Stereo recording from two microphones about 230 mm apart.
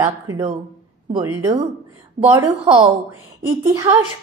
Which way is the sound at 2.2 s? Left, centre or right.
Centre.